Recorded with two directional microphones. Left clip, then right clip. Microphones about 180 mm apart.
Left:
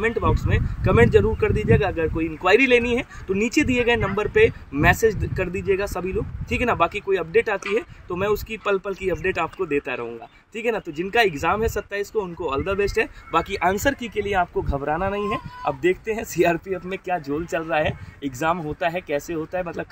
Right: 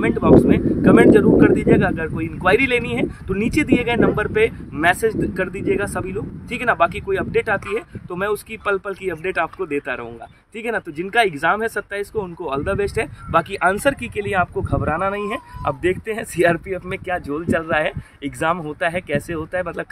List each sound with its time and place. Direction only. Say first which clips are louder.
0.0 s speech: right 9 dB; 15° right (ahead or behind)